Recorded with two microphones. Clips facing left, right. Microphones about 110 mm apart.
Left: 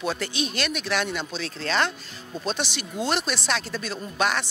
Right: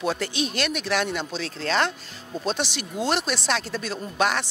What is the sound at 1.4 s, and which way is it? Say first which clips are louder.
Speech: right 1 dB; 50° right (ahead or behind).